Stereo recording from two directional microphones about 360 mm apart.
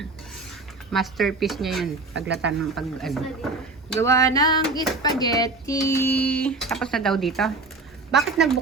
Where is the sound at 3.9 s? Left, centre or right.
Centre.